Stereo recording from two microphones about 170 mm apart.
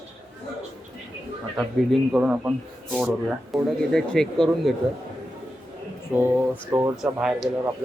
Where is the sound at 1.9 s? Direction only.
5° right (ahead or behind).